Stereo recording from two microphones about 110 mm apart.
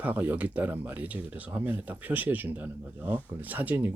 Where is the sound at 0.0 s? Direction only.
15° right (ahead or behind).